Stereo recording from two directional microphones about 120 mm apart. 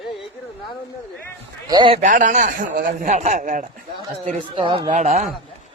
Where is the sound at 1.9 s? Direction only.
90° right.